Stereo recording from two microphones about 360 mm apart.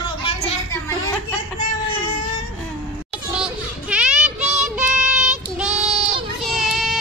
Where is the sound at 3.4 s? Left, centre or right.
Centre.